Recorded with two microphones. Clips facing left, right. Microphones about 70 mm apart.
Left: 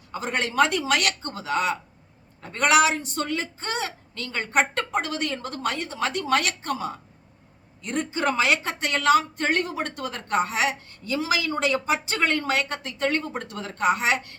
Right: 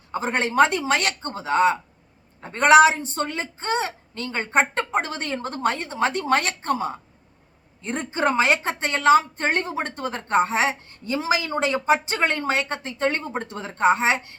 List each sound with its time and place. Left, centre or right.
0.1 s a woman's voice: right